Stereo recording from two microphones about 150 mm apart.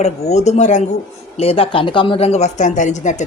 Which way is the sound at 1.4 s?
40° left (ahead or behind).